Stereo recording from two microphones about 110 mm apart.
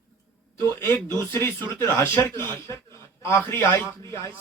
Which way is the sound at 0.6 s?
20° left (ahead or behind).